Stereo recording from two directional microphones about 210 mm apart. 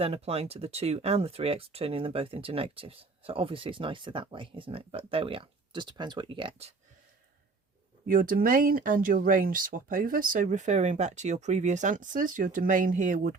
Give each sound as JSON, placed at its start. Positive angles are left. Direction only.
{"t": 0.0, "sound": "speech", "side_deg": -30}
{"t": 8.0, "sound": "speech", "side_deg": -40}